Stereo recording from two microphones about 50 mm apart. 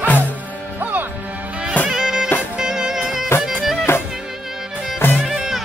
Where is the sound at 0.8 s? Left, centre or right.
Right.